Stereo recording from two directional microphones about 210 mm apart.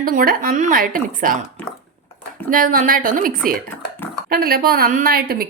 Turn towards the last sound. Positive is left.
turn(degrees=-45)  # may be behind; listen again after turning